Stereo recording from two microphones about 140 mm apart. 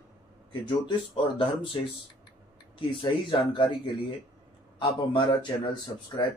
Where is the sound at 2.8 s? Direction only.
40° left (ahead or behind).